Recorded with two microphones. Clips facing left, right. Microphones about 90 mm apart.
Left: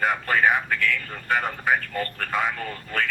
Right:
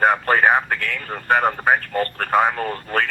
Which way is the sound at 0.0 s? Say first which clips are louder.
Right 5 dB; 45° right (ahead or behind).